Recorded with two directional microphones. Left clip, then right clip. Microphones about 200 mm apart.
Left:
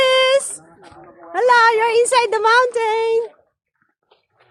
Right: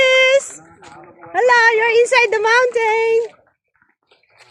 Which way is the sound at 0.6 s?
20° right (ahead or behind).